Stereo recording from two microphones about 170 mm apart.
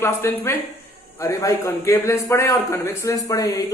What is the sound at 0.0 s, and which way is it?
A man's voice, 15° left (ahead or behind).